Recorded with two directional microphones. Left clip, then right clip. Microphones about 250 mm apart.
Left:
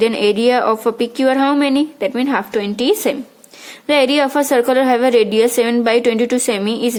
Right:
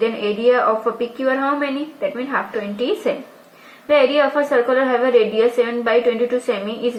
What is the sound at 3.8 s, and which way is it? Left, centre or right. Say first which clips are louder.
A woman's voice: left 1 dB; left.